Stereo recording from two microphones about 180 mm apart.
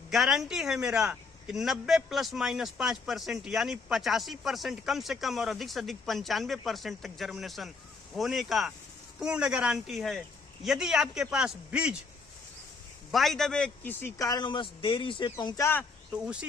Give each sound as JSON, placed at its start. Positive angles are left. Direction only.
{"t": 0.1, "sound": "a man's voice", "side_deg": 0}
{"t": 13.1, "sound": "a man's voice", "side_deg": 0}
{"t": 16.2, "sound": "a man's voice", "side_deg": -5}